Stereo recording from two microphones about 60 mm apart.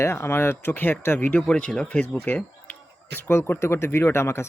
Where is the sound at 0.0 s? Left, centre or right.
Left.